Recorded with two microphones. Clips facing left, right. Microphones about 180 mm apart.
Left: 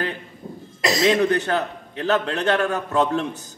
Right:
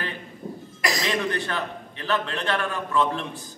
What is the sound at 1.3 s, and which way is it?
A man's voice, 40° left (ahead or behind).